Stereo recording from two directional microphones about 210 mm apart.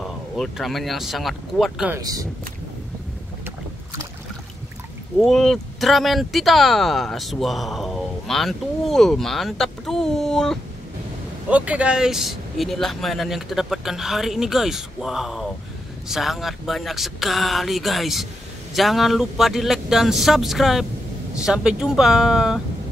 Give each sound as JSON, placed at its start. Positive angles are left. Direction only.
{"t": 0.0, "sound": "speech", "side_deg": 0}
{"t": 2.0, "sound": "speech", "side_deg": -15}
{"t": 5.2, "sound": "speech", "side_deg": 0}